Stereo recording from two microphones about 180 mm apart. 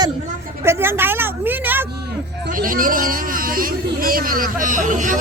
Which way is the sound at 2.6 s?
50° right (ahead or behind).